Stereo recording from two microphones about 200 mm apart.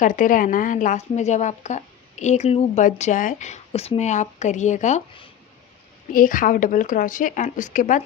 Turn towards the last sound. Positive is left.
turn(degrees=40)  # may be behind; listen again after turning